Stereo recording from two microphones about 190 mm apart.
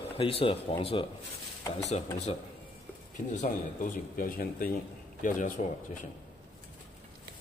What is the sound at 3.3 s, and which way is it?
Speech, 40° left (ahead or behind).